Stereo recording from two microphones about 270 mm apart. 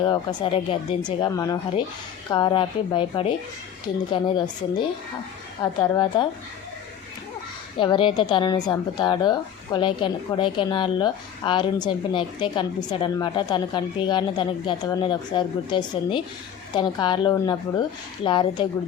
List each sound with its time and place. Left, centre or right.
0.0 s a woman's voice: centre
7.8 s a woman's voice: centre